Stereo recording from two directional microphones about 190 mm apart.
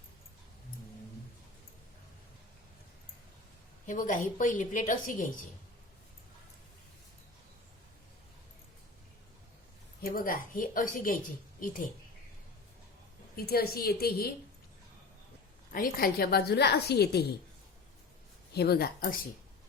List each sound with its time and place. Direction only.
3.8 s a woman's voice: 45° left (ahead or behind)
10.0 s a woman's voice: 50° left (ahead or behind)
13.3 s a woman's voice: 55° left (ahead or behind)
15.7 s a woman's voice: 50° left (ahead or behind)
18.5 s a woman's voice: 55° left (ahead or behind)